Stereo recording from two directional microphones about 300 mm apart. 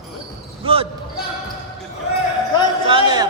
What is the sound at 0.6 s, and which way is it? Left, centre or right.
Speech, centre.